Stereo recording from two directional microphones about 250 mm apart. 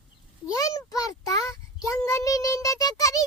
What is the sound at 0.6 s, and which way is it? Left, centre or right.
Child singing, centre.